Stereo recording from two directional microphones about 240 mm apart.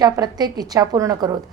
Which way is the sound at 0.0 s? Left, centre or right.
Centre.